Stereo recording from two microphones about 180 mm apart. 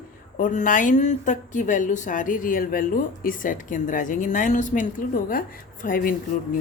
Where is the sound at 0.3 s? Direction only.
45° left (ahead or behind).